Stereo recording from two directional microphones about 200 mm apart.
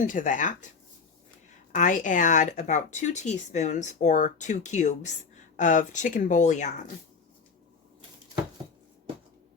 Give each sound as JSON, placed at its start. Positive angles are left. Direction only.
{"t": 0.0, "sound": "speech", "side_deg": 40}
{"t": 1.7, "sound": "speech", "side_deg": 40}